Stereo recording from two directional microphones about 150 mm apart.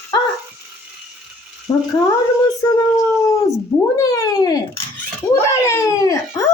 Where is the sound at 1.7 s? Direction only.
35° left (ahead or behind).